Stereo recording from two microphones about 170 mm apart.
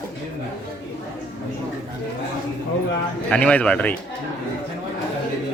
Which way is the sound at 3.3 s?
5° left (ahead or behind).